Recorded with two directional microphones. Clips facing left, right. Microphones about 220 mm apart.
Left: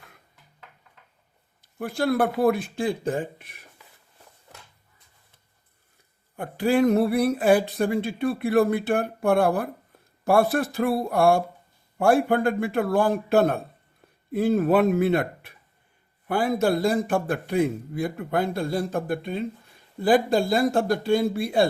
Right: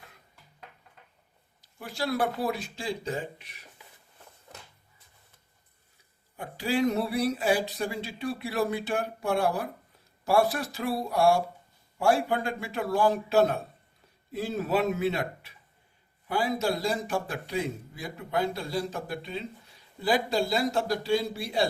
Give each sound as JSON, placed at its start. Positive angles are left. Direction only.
{"t": 1.6, "sound": "a man's voice", "side_deg": 55}
{"t": 6.3, "sound": "a man's voice", "side_deg": 55}